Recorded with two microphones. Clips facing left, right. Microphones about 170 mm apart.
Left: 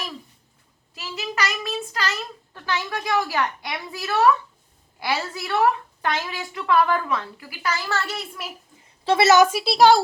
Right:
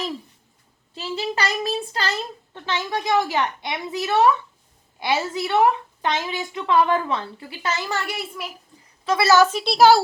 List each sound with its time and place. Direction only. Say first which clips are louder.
0.9 s a child's voice: right 3 dB; 30° right (ahead or behind); by 8.2 s 15° right (ahead or behind)
8.4 s a child's voice: right 1 dB; centre (ahead or behind)
9.0 s a woman's voice: left 1 dB; 25° left (ahead or behind); by 10.0 s centre (ahead or behind)